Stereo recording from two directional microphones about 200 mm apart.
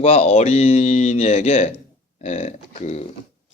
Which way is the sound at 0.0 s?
30° left (ahead or behind).